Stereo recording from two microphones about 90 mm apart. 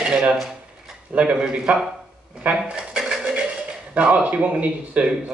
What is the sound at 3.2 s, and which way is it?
A man's voice, 15° right (ahead or behind).